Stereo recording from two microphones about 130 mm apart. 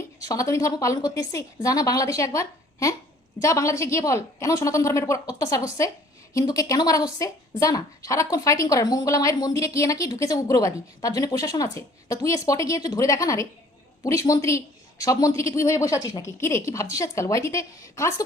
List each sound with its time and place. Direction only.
0.2 s a woman's voice: 25° left (ahead or behind)